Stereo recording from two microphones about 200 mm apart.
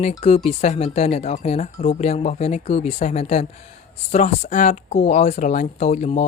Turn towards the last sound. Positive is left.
turn(degrees=35)  # may be behind; listen again after turning